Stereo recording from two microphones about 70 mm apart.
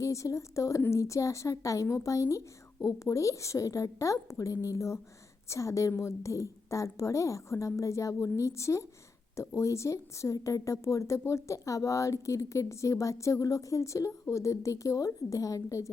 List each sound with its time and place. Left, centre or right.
0.0 s a woman's voice: left